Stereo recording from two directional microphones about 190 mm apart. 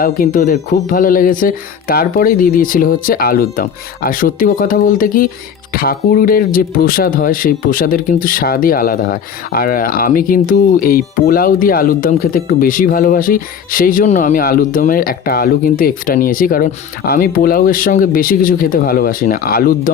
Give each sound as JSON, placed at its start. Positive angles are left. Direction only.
{"t": 0.0, "sound": "speech", "side_deg": 50}